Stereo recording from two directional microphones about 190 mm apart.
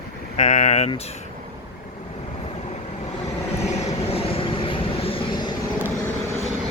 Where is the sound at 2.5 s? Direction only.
35° left (ahead or behind).